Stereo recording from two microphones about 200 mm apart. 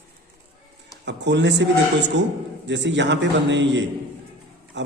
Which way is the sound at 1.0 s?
60° right (ahead or behind).